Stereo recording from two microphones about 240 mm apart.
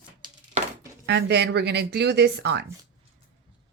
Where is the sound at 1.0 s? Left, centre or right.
Right.